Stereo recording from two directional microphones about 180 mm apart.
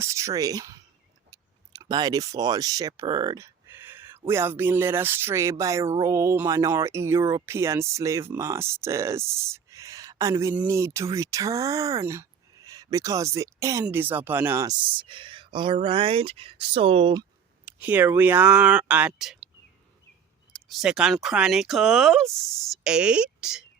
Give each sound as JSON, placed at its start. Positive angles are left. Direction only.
{"t": 0.0, "sound": "speech", "side_deg": -15}
{"t": 1.3, "sound": "a sound", "side_deg": -20}
{"t": 4.3, "sound": "speech", "side_deg": -15}
{"t": 17.7, "sound": "speech", "side_deg": -10}
{"t": 20.5, "sound": "speech", "side_deg": 0}